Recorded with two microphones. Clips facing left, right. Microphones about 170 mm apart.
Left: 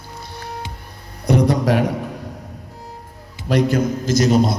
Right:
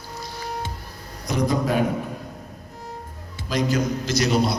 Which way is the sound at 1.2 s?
65° left (ahead or behind).